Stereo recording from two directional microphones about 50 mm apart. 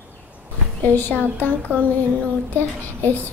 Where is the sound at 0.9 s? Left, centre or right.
Left.